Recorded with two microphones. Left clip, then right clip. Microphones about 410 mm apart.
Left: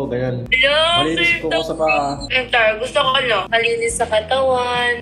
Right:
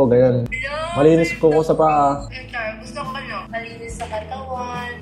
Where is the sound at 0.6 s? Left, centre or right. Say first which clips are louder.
Left 11 dB; left.